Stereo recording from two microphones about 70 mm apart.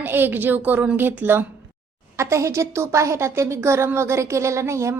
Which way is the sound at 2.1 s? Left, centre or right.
Right.